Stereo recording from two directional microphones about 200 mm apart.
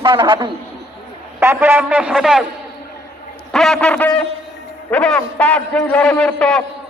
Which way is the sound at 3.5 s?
Centre (ahead or behind).